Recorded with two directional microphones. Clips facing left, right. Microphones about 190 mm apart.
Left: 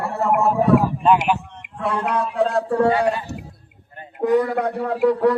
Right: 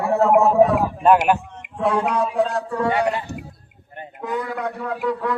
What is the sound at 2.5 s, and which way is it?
Speech, 30° left (ahead or behind).